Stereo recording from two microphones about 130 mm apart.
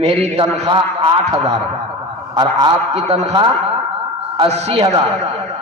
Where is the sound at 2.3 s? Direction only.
35° right (ahead or behind).